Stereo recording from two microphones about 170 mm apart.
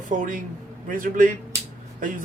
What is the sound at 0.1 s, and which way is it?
A man's voice, 50° right (ahead or behind).